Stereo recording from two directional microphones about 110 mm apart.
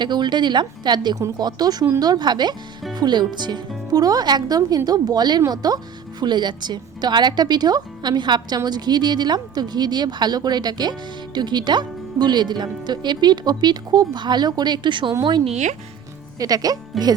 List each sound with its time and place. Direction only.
0.0 s a woman's voice: 40° right (ahead or behind)
15.4 s speech: 90° right
16.4 s speech: 35° right (ahead or behind)
16.9 s speech: centre (ahead or behind)